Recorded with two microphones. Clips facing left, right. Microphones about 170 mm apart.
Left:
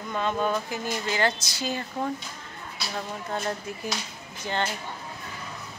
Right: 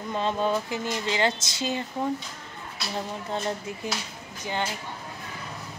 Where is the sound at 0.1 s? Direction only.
30° right (ahead or behind).